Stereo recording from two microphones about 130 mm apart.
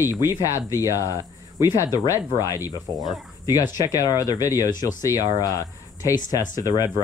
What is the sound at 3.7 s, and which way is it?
Speech, 30° left (ahead or behind).